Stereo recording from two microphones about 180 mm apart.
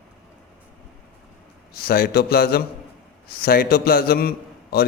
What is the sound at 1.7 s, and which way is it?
A man's voice, 55° left (ahead or behind).